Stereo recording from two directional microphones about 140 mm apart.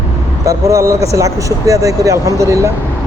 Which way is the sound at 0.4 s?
20° right (ahead or behind).